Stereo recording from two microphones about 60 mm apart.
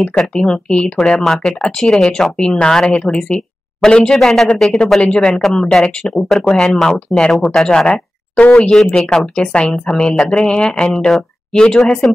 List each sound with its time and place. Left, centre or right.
0.2 s speech: centre
1.0 s speech: centre
5.0 s speech: centre
5.4 s speech: centre
7.6 s speech: centre
7.9 s a sound: left
8.5 s speech: centre